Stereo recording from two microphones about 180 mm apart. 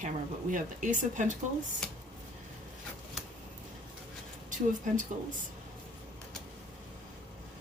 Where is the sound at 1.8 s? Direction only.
5° left (ahead or behind).